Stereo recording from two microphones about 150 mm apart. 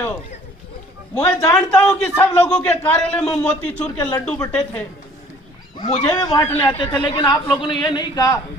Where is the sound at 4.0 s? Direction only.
25° left (ahead or behind).